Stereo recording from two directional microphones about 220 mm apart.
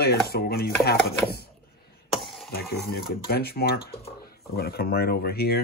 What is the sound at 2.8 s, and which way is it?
Speech, 45° left (ahead or behind).